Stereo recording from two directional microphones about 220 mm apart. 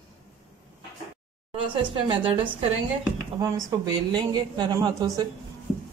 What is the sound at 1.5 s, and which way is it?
A woman's voice, 20° right (ahead or behind).